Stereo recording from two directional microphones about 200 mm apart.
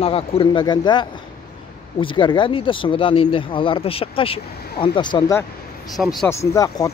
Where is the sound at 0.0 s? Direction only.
30° left (ahead or behind).